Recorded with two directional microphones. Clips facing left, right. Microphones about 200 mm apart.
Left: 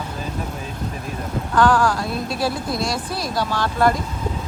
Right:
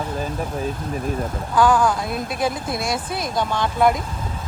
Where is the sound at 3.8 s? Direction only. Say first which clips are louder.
Right 1 dB; centre (ahead or behind).